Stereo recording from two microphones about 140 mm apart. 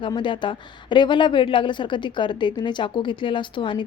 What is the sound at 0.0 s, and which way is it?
Speech, 35° left (ahead or behind).